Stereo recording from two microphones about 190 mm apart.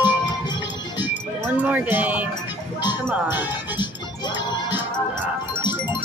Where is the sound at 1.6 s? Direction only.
10° right (ahead or behind).